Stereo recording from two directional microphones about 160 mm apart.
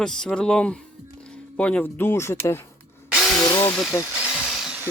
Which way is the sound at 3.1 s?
Centre (ahead or behind).